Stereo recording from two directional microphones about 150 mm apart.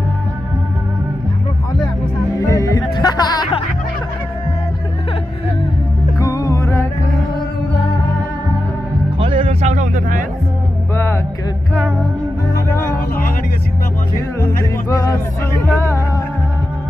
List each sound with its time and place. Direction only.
2.3 s music: 20° left (ahead or behind)
6.1 s music: 20° left (ahead or behind)
9.2 s a sound: 40° right (ahead or behind); by 10.2 s 65° right (ahead or behind)
12.5 s music: 75° left (ahead or behind)
14.4 s music: 25° left (ahead or behind)